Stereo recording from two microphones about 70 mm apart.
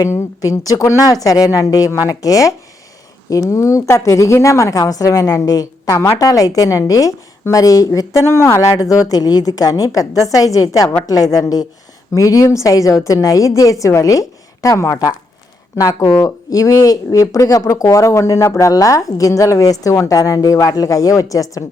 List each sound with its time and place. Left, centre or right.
0.4 s a woman's voice: left
8.8 s a woman's voice: left